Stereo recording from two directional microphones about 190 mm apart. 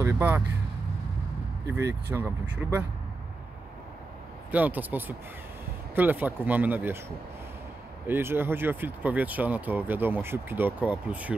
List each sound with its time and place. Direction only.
0.0 s speech: 10° right (ahead or behind)
1.7 s speech: 15° right (ahead or behind)
4.5 s speech: 10° right (ahead or behind)
8.1 s speech: 10° right (ahead or behind)